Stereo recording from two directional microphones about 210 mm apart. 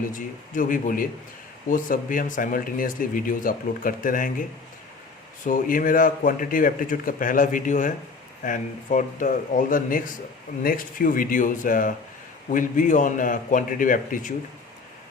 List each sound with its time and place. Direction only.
0.1 s speech: 40° left (ahead or behind)
5.5 s speech: 40° left (ahead or behind)